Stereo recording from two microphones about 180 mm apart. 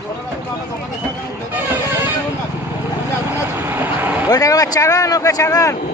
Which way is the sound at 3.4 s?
10° right (ahead or behind).